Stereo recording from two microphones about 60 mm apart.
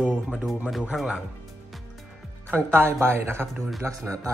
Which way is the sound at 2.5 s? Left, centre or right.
Right.